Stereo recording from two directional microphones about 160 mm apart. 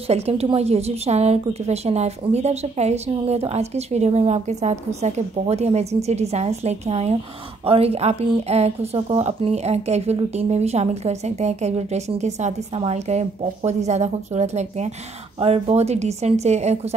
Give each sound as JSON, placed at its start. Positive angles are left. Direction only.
{"t": 0.1, "sound": "a woman's voice", "side_deg": -40}